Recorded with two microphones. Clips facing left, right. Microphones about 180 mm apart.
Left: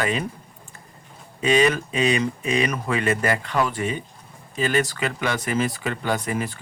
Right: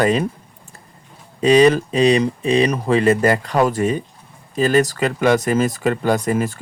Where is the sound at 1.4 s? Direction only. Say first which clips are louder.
Right 7 dB; 35° right (ahead or behind).